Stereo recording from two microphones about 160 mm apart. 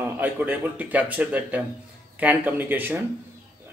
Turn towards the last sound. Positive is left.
turn(degrees=-10)  # may be behind; listen again after turning